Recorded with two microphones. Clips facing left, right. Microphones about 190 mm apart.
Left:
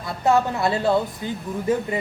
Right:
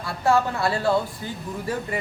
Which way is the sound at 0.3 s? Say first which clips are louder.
Left 2 dB; 20° left (ahead or behind).